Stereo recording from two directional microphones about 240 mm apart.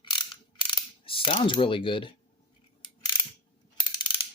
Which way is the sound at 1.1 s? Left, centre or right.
Left.